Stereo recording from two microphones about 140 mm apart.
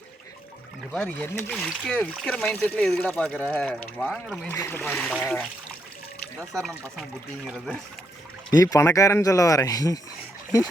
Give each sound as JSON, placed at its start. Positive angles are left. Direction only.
{"t": 0.9, "sound": "speech", "side_deg": 10}
{"t": 1.5, "sound": "speech", "side_deg": 5}
{"t": 4.8, "sound": "speech", "side_deg": 5}
{"t": 6.5, "sound": "speech", "side_deg": 5}
{"t": 8.5, "sound": "speech", "side_deg": 25}